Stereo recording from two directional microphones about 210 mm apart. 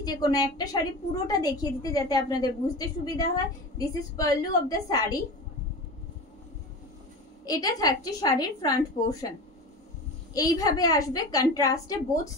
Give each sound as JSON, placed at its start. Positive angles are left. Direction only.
{"t": 0.0, "sound": "a woman's voice", "side_deg": 20}
{"t": 7.4, "sound": "a woman's voice", "side_deg": 15}
{"t": 10.3, "sound": "a woman's voice", "side_deg": 15}